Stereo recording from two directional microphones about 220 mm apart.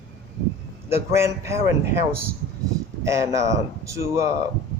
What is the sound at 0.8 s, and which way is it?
Speech, 10° right (ahead or behind).